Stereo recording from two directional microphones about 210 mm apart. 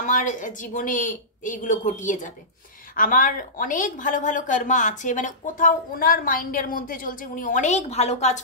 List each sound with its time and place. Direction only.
0.0 s a woman's voice: 35° left (ahead or behind)